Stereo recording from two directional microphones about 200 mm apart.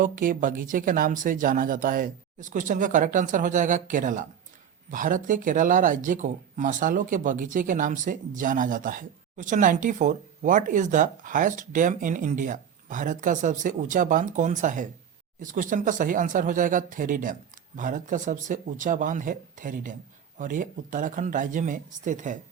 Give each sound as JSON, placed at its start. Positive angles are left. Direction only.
{"t": 0.0, "sound": "speech", "side_deg": -45}